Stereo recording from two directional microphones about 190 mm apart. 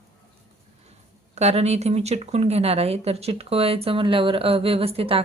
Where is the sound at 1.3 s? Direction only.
35° right (ahead or behind).